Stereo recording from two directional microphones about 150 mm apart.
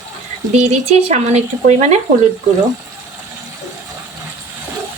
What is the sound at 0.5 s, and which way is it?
Speech, 45° right (ahead or behind).